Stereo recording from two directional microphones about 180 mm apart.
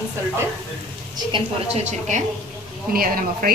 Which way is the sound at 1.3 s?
40° right (ahead or behind).